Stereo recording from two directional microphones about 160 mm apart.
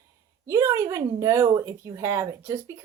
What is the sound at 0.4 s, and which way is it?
A woman's voice, 20° right (ahead or behind).